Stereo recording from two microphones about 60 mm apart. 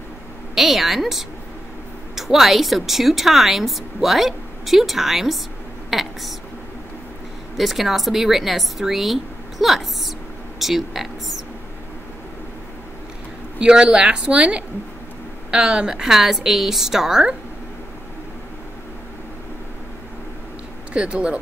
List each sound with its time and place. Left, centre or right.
0.6 s a woman's voice: centre
7.5 s speech: centre
10.6 s a sound: centre
13.6 s a woman's voice: centre
20.9 s a woman's voice: centre